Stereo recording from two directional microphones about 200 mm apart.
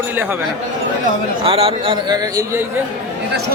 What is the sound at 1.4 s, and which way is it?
A man's voice, 30° right (ahead or behind).